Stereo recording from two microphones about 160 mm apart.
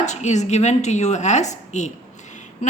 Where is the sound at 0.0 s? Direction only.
45° left (ahead or behind).